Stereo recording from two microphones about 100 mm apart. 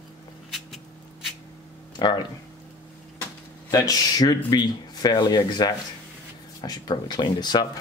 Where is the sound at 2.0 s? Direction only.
45° left (ahead or behind).